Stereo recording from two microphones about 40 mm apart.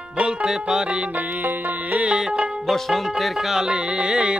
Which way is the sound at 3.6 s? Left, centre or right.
Right.